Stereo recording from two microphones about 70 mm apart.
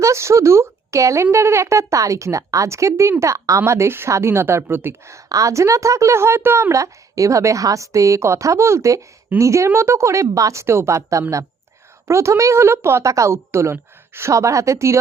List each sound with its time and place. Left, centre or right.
0.0 s a woman's voice: right
3.7 s a woman's voice: right